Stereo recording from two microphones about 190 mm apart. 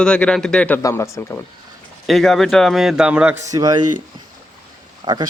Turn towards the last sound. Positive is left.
turn(degrees=-20)  # may be behind; listen again after turning